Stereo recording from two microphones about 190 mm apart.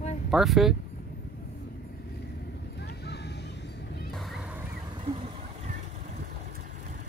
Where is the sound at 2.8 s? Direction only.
60° left (ahead or behind).